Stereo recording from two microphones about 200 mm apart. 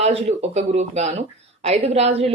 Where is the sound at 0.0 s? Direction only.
30° right (ahead or behind).